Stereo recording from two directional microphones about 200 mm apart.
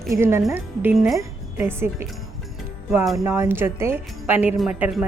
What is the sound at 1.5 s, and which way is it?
Speech, 10° right (ahead or behind).